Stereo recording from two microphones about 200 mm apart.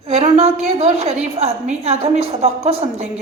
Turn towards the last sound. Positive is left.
turn(degrees=-30)  # may be behind; listen again after turning